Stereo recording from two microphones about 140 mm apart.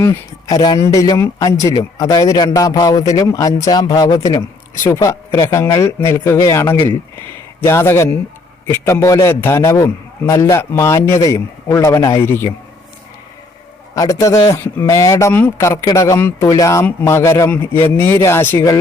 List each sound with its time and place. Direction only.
0.0 s a man's voice: 25° left (ahead or behind)
13.9 s a man's voice: 25° left (ahead or behind)